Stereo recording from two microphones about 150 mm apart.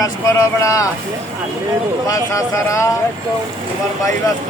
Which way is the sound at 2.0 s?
20° left (ahead or behind).